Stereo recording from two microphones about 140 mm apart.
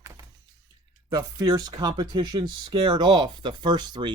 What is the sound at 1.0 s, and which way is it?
Speech, 30° right (ahead or behind).